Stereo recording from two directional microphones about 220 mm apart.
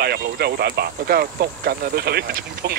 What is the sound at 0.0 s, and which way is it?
Speech, 45° right (ahead or behind).